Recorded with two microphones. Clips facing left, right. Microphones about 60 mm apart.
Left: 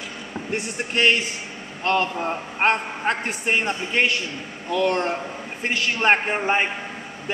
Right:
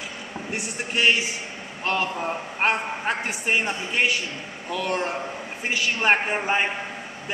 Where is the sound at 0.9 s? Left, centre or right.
Left.